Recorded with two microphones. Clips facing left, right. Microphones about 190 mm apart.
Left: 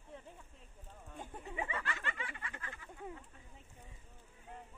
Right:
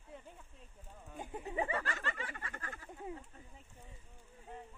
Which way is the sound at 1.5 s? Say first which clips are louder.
Right 4 dB; 35° right (ahead or behind).